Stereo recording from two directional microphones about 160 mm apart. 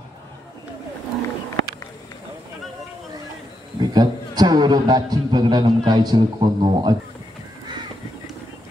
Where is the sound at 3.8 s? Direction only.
25° right (ahead or behind).